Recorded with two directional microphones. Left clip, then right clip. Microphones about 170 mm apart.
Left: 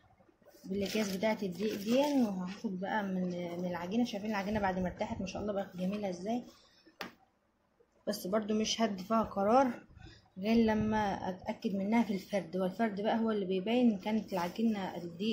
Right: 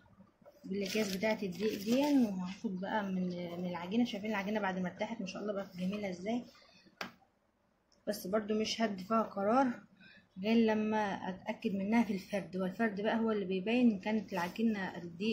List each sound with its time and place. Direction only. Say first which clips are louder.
0.7 s a woman's voice: left 1 dB; 20° left (ahead or behind)
8.0 s speech: left 1 dB; 35° left (ahead or behind)
10.4 s a woman's voice: left 1 dB; 20° left (ahead or behind)